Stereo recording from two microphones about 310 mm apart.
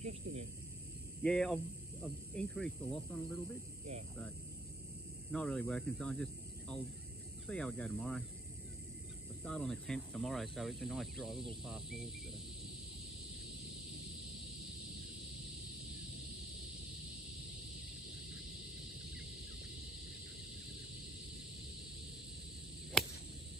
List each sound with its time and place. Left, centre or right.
0.0 s speech: right
1.2 s speech: centre
5.3 s speech: centre
9.4 s speech: centre
23.0 s a sound: centre